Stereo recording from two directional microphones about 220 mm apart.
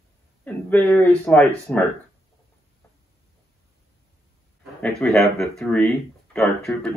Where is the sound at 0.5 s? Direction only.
10° left (ahead or behind).